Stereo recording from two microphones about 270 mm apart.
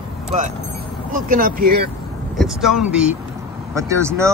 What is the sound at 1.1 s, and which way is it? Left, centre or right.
Speech, right.